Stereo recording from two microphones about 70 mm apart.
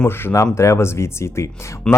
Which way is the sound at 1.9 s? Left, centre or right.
Centre.